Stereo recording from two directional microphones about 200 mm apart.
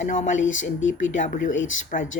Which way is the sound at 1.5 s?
70° left (ahead or behind).